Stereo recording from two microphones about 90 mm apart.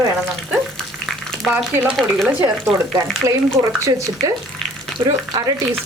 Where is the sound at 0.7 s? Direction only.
5° left (ahead or behind).